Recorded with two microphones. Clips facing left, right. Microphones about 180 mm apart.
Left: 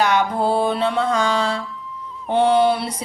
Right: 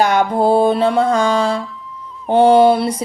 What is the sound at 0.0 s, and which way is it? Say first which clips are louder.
Music: right 4 dB; 45° right (ahead or behind).